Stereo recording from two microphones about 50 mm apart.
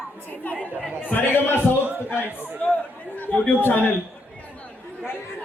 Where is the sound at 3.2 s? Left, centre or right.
Left.